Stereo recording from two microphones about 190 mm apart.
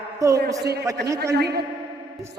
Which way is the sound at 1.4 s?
60° right (ahead or behind).